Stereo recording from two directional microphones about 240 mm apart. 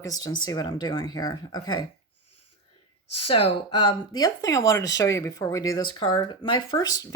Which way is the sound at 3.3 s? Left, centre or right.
Left.